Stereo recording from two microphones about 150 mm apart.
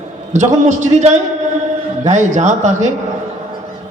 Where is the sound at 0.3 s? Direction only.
55° right (ahead or behind).